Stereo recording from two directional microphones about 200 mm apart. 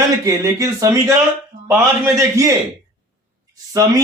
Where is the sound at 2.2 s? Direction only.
15° right (ahead or behind).